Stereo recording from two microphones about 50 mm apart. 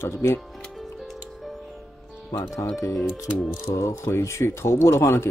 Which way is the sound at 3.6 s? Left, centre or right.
Left.